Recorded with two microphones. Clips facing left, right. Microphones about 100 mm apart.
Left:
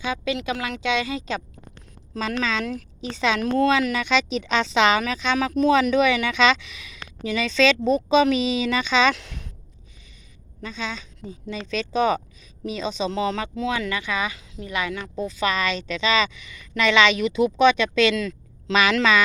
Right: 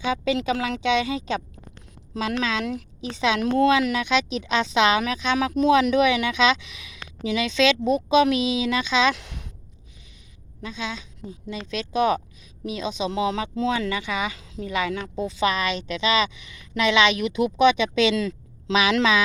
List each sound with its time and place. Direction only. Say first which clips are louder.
0.0 s speech: right 3 dB; 30° right (ahead or behind)
2.1 s a woman's voice: even; 15° right (ahead or behind)
11.3 s a woman's voice: left 2 dB; 5° right (ahead or behind)
13.6 s a woman's voice: right 1 dB; 25° right (ahead or behind)